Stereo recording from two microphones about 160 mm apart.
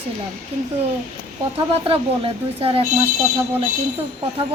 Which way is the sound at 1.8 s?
35° right (ahead or behind).